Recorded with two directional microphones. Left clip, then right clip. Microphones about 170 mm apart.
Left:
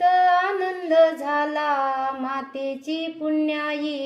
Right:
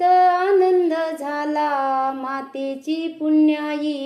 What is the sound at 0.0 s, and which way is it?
Child singing, 30° right (ahead or behind).